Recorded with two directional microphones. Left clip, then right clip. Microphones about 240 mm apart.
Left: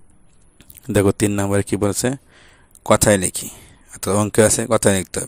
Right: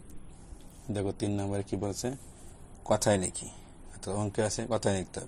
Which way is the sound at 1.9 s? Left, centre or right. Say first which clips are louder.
Left 14 dB; left.